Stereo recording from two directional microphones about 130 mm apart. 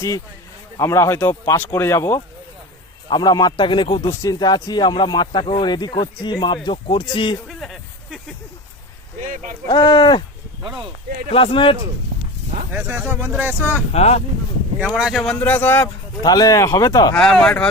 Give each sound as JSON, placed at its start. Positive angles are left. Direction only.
{"t": 0.8, "sound": "speech", "side_deg": 25}
{"t": 3.1, "sound": "speech", "side_deg": 30}
{"t": 7.4, "sound": "a sound", "side_deg": 0}
{"t": 9.2, "sound": "speech", "side_deg": -75}
{"t": 9.6, "sound": "speech", "side_deg": 35}
{"t": 10.6, "sound": "speech", "side_deg": -40}
{"t": 11.3, "sound": "speech", "side_deg": 45}
{"t": 12.7, "sound": "speech", "side_deg": -15}
{"t": 13.9, "sound": "speech", "side_deg": 55}
{"t": 14.9, "sound": "speech", "side_deg": -5}
{"t": 15.4, "sound": "speech", "side_deg": 15}
{"t": 16.2, "sound": "speech", "side_deg": 30}
{"t": 17.2, "sound": "speech", "side_deg": 5}